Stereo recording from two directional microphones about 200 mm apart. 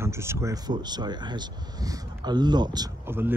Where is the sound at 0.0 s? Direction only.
15° right (ahead or behind).